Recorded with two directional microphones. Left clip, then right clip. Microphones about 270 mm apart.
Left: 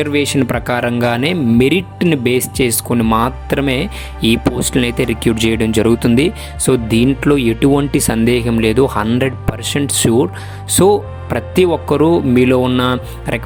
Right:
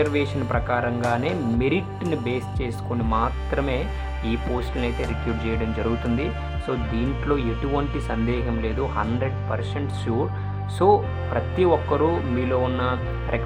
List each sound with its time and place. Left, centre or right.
0.0 s speech: left